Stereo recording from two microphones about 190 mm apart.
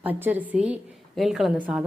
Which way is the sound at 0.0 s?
10° right (ahead or behind).